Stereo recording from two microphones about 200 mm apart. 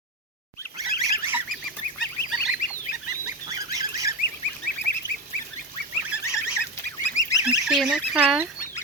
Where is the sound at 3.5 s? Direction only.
15° right (ahead or behind).